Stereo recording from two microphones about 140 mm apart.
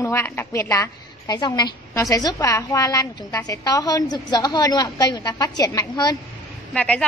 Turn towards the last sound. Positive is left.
turn(degrees=10)  # may be behind; listen again after turning